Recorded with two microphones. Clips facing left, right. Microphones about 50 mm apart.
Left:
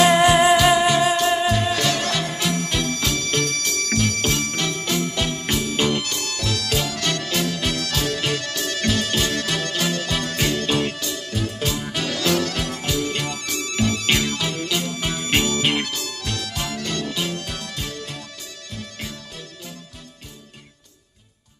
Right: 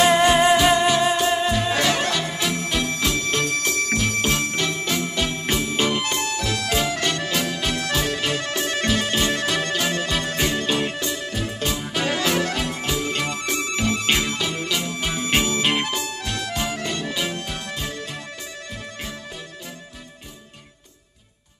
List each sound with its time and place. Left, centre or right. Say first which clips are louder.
0.0 s music: left 1 dB; centre
1.7 s music: right 1 dB; right
15.2 s music: left 1 dB; centre
15.8 s music: right 2 dB; right